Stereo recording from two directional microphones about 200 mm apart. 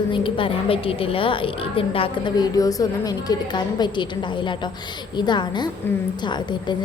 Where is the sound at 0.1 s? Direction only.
25° left (ahead or behind).